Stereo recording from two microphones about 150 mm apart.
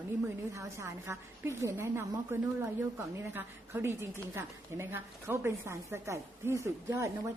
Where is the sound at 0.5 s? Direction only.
20° right (ahead or behind).